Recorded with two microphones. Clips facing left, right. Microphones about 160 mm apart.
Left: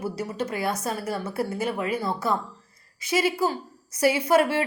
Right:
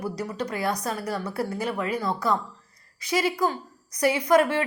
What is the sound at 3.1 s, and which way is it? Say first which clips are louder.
Speech: left 1 dB; 25° left (ahead or behind).